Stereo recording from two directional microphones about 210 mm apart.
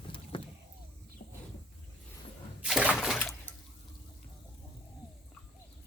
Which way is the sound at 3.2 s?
5° left (ahead or behind).